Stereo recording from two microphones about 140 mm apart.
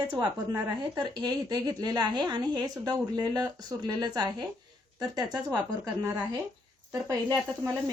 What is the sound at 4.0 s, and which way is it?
Speech, 25° right (ahead or behind).